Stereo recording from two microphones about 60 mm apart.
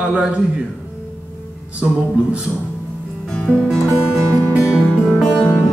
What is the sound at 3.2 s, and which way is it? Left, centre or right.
Music, centre.